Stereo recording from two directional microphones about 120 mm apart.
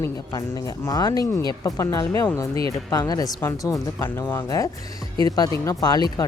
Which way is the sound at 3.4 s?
20° left (ahead or behind).